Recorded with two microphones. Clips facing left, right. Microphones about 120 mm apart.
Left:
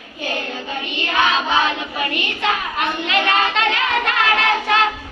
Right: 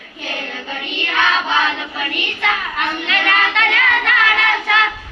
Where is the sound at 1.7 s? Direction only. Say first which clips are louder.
Left 1 dB; 25° left (ahead or behind).